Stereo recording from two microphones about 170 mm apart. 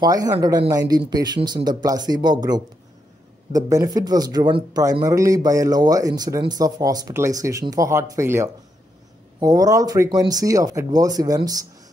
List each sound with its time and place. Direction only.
0.0 s speech: 20° right (ahead or behind)